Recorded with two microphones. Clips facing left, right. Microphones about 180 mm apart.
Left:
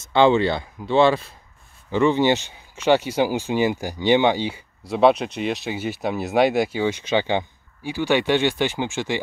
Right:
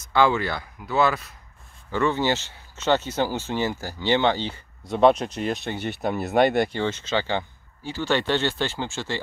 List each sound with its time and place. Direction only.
0.0 s speech: 25° left (ahead or behind)
1.9 s speech: 15° left (ahead or behind)